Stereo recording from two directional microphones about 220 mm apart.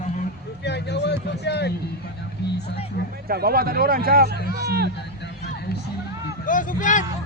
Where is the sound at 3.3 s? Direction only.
45° right (ahead or behind).